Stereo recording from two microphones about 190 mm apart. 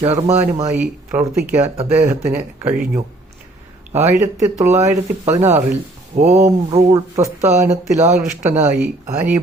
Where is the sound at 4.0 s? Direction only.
35° right (ahead or behind).